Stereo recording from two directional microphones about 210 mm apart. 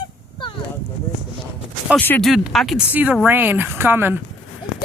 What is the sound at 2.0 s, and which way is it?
Speech, 10° left (ahead or behind).